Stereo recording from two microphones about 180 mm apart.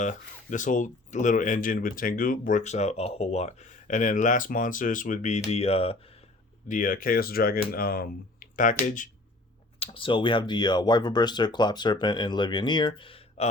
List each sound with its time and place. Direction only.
0.0 s speech: 45° left (ahead or behind)
6.7 s speech: 50° left (ahead or behind)
9.8 s speech: 30° left (ahead or behind)